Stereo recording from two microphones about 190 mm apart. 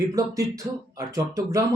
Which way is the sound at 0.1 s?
15° right (ahead or behind).